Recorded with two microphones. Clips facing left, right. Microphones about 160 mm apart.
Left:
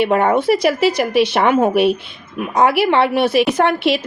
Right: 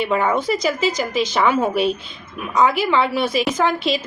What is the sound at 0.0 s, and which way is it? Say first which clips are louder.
A woman's voice: left 5 dB; 55° left (ahead or behind).